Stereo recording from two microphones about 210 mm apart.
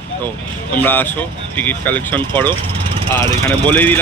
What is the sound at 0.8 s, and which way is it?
Speech, 10° left (ahead or behind).